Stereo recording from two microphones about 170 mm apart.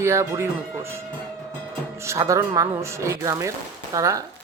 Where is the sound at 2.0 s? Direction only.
15° right (ahead or behind).